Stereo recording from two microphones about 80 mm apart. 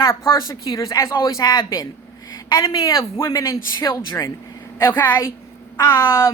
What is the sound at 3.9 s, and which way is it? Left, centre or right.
A woman's voice, left.